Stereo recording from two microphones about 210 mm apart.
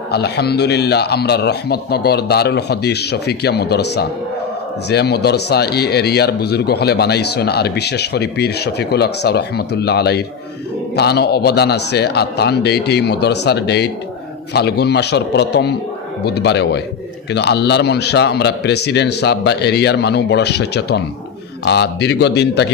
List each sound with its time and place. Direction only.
0.1 s speech: 50° left (ahead or behind)